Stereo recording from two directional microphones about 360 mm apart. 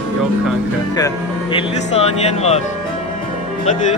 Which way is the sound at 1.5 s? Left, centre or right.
Centre.